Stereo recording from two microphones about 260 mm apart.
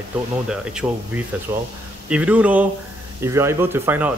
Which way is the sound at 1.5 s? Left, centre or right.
Centre.